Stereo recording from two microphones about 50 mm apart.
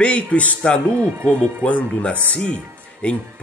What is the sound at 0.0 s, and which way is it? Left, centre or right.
Speech, left.